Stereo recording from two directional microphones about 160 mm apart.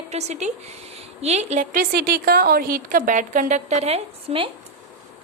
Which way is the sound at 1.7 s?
70° right (ahead or behind).